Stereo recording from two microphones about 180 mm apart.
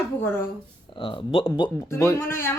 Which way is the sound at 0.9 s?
30° left (ahead or behind).